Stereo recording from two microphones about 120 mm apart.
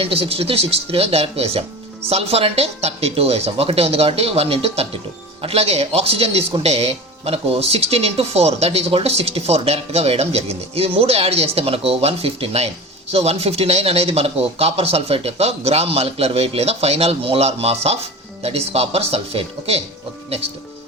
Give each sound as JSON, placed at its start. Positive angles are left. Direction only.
{"t": 0.0, "sound": "speech", "side_deg": -55}